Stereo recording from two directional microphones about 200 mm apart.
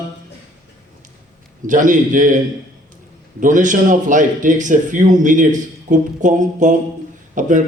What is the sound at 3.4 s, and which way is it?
A man's voice, 40° right (ahead or behind).